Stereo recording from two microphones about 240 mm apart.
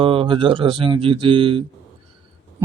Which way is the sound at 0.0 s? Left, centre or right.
Right.